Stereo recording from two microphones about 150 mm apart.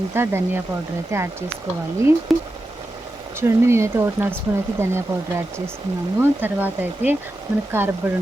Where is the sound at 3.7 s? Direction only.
20° right (ahead or behind).